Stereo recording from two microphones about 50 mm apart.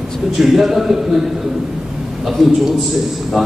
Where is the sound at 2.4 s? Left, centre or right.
Centre.